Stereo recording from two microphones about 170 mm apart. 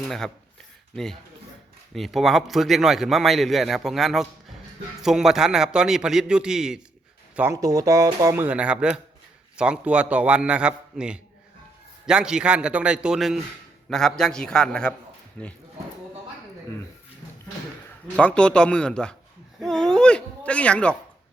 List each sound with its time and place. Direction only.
0.0 s a man's voice: 5° left (ahead or behind)
7.3 s a man's voice: 15° right (ahead or behind); by 15.5 s 10° left (ahead or behind)
18.2 s speech: 5° left (ahead or behind)
19.5 s a sound: 5° left (ahead or behind)